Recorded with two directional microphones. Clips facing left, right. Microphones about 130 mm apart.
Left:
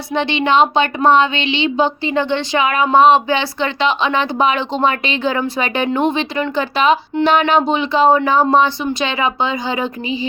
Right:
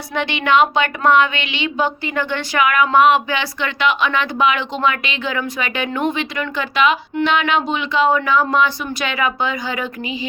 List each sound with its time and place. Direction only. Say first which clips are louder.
0.1 s a woman's voice: left 2 dB; 25° left (ahead or behind)